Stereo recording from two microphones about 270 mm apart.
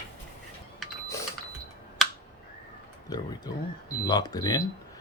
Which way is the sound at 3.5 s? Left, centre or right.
Centre.